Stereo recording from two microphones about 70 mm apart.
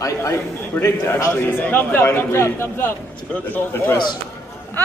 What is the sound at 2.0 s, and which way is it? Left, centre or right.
Speech, left.